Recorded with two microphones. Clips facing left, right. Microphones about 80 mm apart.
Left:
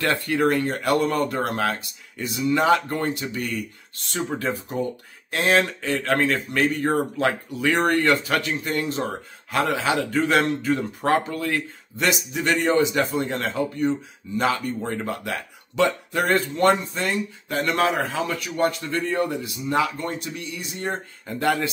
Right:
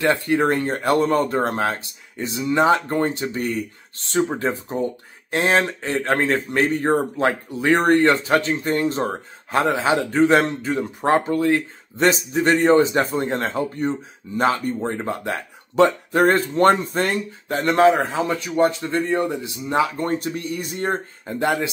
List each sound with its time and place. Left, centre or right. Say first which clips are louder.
0.0 s speech: right 3 dB; right
17.5 s speech: right 7 dB; right
21.3 s speech: right 1 dB; right